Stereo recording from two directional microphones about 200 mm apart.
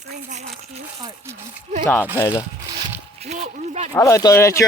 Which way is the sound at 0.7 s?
20° right (ahead or behind).